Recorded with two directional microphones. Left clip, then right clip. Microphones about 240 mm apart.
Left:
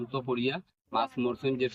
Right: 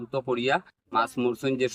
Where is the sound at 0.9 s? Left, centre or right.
Centre.